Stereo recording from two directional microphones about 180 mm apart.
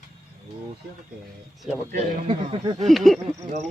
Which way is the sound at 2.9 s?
Centre (ahead or behind).